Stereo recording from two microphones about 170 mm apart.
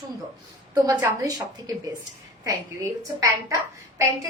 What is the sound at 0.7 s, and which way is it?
A woman's voice, 20° right (ahead or behind).